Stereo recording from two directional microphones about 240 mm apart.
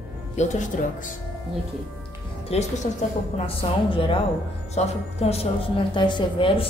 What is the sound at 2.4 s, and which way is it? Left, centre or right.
A woman's voice, left.